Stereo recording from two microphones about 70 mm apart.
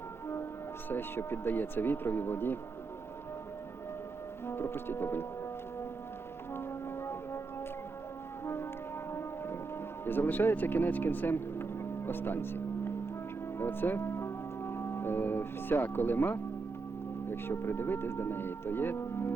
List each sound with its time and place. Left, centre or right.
0.9 s speech: left
4.4 s speech: left
6.5 s music: left
10.1 s speech: left